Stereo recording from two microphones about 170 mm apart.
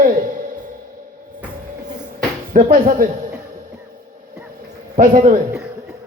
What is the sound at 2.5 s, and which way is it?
Speech, 55° right (ahead or behind).